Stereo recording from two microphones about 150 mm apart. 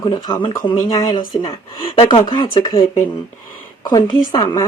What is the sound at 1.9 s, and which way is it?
Speech, 40° left (ahead or behind).